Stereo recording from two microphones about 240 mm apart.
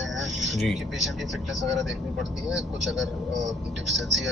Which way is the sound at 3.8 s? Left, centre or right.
Centre.